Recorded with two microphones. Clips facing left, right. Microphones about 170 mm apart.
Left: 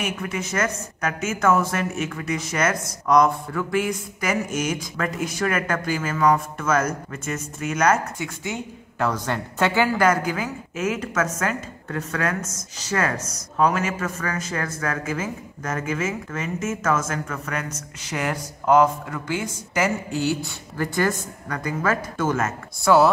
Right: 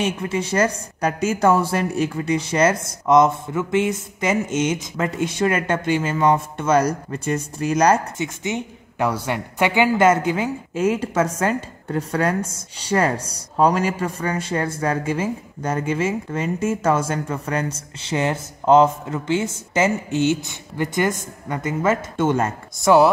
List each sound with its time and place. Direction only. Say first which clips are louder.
0.0 s a woman's voice: right 5 dB; 30° right (ahead or behind)
8.2 s a woman's voice: right 4 dB; 20° right (ahead or behind)